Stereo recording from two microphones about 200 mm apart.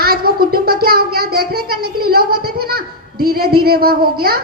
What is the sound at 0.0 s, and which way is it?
Child singing, 50° right (ahead or behind).